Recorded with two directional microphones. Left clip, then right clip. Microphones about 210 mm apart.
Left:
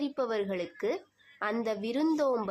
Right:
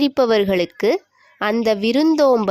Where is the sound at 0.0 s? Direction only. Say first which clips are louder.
Right 15 dB; 45° right (ahead or behind).